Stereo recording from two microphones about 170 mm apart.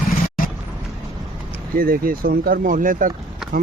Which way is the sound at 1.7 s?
60° right (ahead or behind).